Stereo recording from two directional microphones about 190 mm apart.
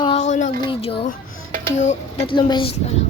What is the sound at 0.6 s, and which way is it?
Speech, 25° left (ahead or behind).